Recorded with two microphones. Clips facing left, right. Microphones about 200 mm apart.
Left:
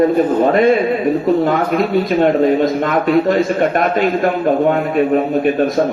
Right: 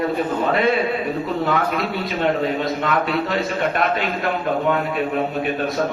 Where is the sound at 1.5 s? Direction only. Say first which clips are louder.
Left 6 dB; 45° left (ahead or behind).